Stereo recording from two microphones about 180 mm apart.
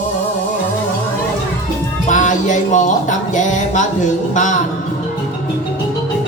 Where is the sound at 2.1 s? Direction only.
45° left (ahead or behind).